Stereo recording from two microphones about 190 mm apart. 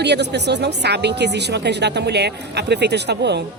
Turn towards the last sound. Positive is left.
turn(degrees=-60)  # may be behind; listen again after turning